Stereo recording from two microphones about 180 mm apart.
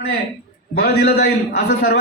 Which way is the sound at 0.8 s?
60° left (ahead or behind).